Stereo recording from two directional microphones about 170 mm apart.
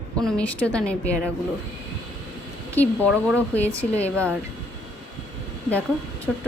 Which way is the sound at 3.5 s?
10° left (ahead or behind).